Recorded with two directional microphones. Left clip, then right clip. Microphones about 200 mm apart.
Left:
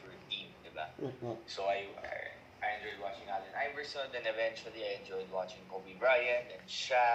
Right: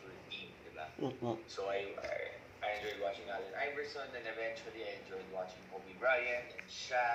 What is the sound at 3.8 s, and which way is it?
Speech, 15° left (ahead or behind).